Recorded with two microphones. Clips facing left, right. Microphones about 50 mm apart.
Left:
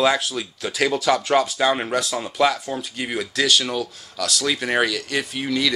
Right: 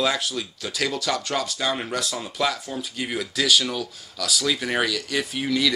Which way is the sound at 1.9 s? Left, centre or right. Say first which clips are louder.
Left 5 dB; centre.